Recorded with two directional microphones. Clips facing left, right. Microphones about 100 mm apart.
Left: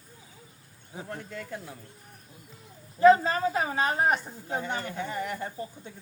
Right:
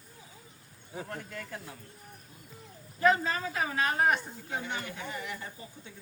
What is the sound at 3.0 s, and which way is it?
Speech, 30° left (ahead or behind).